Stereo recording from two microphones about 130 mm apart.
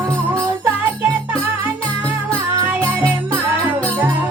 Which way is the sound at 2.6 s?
20° right (ahead or behind).